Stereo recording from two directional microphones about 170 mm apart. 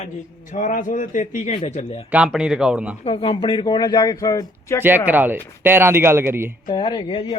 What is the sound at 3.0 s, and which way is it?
Speech, 35° left (ahead or behind).